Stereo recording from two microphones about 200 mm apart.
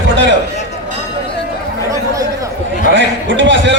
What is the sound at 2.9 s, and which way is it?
Speech, 65° right (ahead or behind).